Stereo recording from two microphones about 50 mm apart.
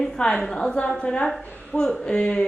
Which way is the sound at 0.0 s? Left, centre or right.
Centre.